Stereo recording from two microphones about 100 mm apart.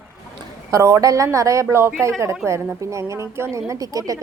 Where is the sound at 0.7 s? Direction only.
30° right (ahead or behind).